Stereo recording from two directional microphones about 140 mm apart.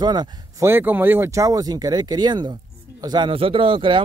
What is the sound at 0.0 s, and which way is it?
Speech, 30° right (ahead or behind).